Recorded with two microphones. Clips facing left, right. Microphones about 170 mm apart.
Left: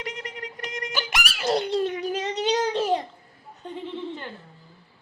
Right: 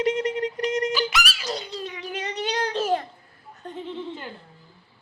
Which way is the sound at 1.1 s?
60° left (ahead or behind).